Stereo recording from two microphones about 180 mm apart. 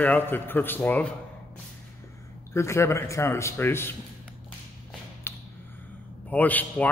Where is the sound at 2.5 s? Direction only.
15° left (ahead or behind).